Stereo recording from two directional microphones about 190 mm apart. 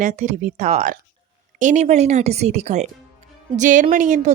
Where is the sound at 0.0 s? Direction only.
40° right (ahead or behind).